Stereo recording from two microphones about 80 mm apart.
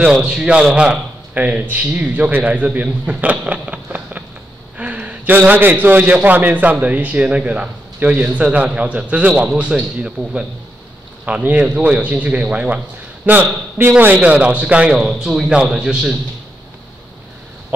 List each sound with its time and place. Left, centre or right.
0.0 s a man's voice: centre